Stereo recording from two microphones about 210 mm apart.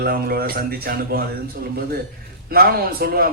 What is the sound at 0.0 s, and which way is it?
A man's voice, 45° right (ahead or behind).